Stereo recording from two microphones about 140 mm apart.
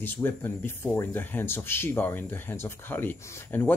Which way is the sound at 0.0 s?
15° left (ahead or behind).